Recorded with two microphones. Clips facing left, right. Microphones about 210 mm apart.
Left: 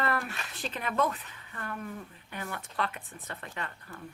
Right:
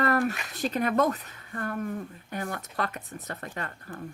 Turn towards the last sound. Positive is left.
turn(degrees=-45)  # may be behind; listen again after turning